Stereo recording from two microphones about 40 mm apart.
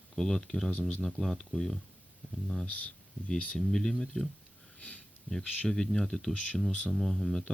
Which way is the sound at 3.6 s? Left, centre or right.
Centre.